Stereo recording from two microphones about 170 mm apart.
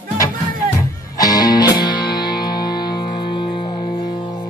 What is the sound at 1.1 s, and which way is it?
Music, 20° left (ahead or behind).